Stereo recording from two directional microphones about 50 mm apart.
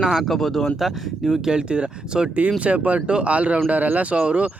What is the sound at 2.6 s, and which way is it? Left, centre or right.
Speech, right.